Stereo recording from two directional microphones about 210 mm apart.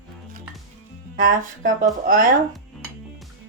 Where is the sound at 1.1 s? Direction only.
40° right (ahead or behind).